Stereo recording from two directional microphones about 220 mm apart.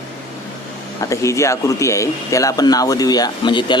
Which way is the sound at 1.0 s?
15° left (ahead or behind).